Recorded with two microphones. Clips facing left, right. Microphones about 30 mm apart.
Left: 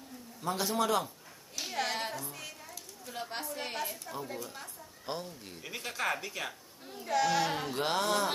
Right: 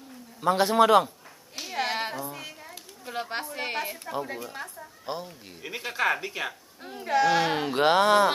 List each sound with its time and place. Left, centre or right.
0.4 s speech: right
1.6 s a sound: right
2.7 s speech: right
5.0 s speech: centre; by 8.3 s right